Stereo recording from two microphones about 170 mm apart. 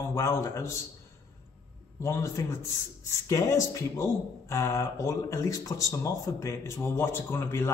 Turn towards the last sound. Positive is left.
turn(degrees=15)  # may be behind; listen again after turning